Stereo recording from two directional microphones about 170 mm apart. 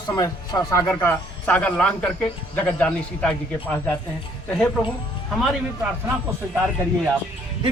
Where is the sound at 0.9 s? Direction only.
10° left (ahead or behind).